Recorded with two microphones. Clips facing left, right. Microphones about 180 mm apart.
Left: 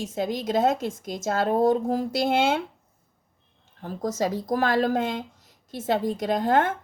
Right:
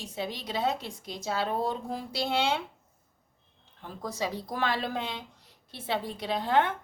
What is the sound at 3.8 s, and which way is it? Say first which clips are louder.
A woman's voice: left 7 dB; 45° left (ahead or behind).